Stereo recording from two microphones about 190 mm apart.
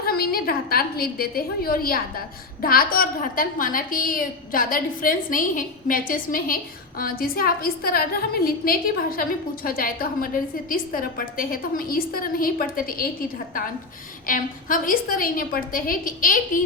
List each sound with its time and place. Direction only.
0.0 s a woman's voice: 50° left (ahead or behind)
14.3 s a woman's voice: 45° left (ahead or behind)